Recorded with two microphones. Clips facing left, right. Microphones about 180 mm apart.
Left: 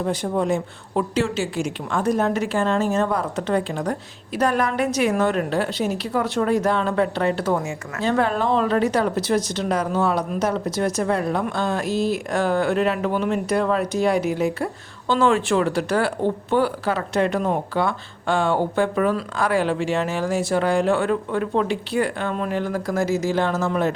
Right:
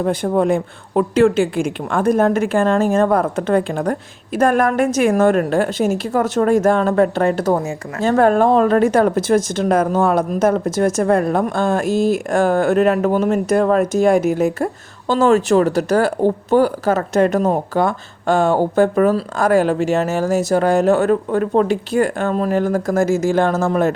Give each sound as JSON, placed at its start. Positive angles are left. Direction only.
{"t": 0.0, "sound": "a woman's voice", "side_deg": -55}